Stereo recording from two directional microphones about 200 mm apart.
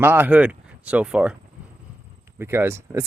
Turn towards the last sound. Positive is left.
turn(degrees=-15)  # may be behind; listen again after turning